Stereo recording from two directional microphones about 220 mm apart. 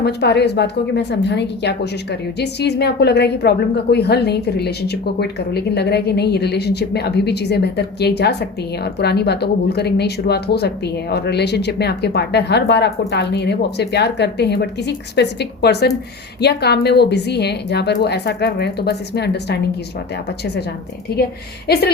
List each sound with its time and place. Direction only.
0.0 s a woman's voice: 50° left (ahead or behind)